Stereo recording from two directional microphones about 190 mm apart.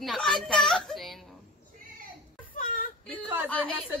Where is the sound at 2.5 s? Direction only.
45° left (ahead or behind).